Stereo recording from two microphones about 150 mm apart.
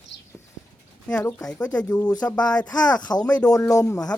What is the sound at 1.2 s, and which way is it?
Speech, 20° left (ahead or behind).